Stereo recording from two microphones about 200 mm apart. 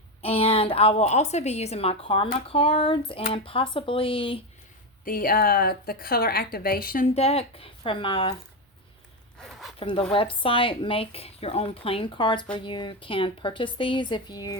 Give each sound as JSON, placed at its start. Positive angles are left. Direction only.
{"t": 0.2, "sound": "a woman's voice", "side_deg": 30}
{"t": 5.0, "sound": "a woman's voice", "side_deg": 45}
{"t": 7.1, "sound": "a woman's voice", "side_deg": 30}
{"t": 9.4, "sound": "zipper", "side_deg": 0}
{"t": 10.4, "sound": "a woman's voice", "side_deg": 25}